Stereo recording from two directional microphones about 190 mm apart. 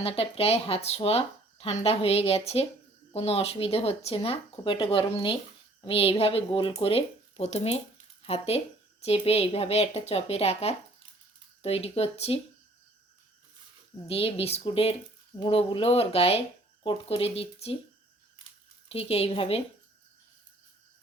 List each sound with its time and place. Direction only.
0.0 s speech: 30° left (ahead or behind)
14.1 s speech: 30° left (ahead or behind)
18.9 s speech: 30° left (ahead or behind)